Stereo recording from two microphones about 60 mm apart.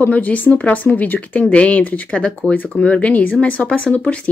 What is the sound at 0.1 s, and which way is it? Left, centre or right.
Speech, left.